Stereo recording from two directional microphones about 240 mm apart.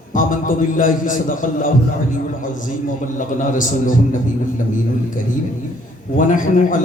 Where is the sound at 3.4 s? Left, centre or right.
Left.